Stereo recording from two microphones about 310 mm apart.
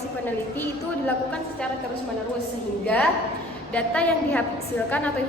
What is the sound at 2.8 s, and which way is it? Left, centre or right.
A woman's voice, centre.